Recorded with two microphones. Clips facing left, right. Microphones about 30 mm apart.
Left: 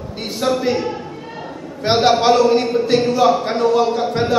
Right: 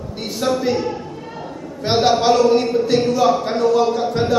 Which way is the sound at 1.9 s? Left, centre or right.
Centre.